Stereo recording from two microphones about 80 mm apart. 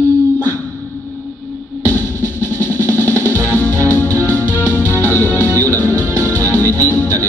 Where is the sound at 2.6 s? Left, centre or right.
Left.